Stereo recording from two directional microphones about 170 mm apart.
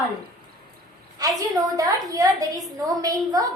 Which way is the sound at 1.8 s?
20° right (ahead or behind).